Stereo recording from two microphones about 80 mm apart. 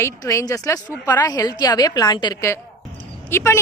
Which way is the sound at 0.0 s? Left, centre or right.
Left.